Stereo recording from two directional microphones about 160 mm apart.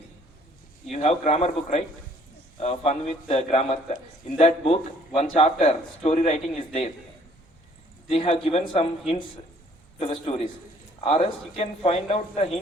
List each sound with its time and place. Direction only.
0.9 s a man's voice: 50° left (ahead or behind)
8.1 s speech: 35° left (ahead or behind)